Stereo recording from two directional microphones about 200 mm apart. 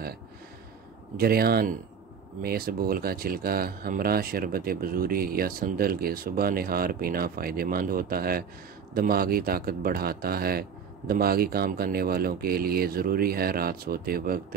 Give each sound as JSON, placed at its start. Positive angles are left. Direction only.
{"t": 1.1, "sound": "speech", "side_deg": -50}